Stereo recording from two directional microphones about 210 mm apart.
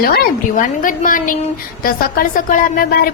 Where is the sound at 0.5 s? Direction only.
40° left (ahead or behind).